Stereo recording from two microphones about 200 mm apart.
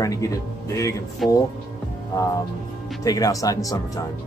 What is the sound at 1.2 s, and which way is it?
Speech, centre (ahead or behind).